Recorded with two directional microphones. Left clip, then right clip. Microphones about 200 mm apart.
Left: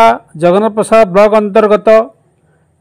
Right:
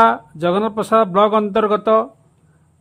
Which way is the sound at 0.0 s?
20° left (ahead or behind).